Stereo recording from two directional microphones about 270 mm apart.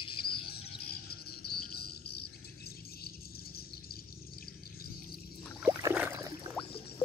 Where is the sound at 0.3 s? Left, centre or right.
Left.